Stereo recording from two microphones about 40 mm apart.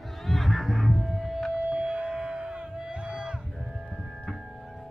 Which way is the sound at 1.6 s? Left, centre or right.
Right.